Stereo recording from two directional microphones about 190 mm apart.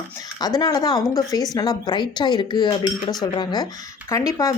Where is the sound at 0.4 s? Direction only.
20° left (ahead or behind).